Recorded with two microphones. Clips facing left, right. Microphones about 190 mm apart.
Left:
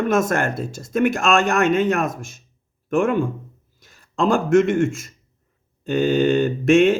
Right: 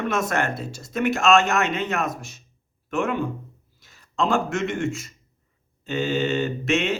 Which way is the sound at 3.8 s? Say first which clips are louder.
Left 3 dB; 50° left (ahead or behind).